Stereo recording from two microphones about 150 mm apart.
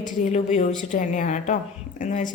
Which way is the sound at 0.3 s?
50° left (ahead or behind).